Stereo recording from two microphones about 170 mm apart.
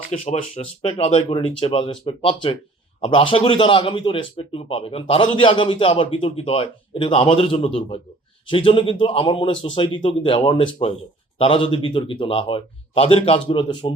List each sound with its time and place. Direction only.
0.1 s a man's voice: 35° left (ahead or behind)